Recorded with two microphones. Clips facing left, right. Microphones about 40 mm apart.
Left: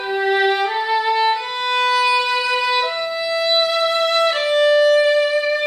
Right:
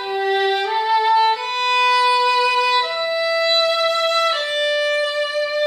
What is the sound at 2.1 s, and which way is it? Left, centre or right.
Music, centre.